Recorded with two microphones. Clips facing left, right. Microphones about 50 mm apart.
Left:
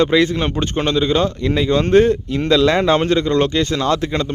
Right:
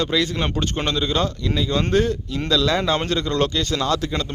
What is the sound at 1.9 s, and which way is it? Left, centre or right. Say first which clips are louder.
Speech: left 7 dB; left.